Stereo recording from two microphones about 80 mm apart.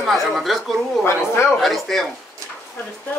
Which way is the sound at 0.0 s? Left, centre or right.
Centre.